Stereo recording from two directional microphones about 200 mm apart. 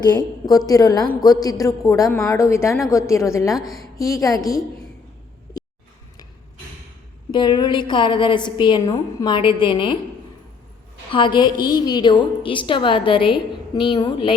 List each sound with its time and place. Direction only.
0.0 s a woman's voice: 20° left (ahead or behind)
7.3 s a woman's voice: 20° left (ahead or behind)
11.1 s a woman's voice: 25° left (ahead or behind)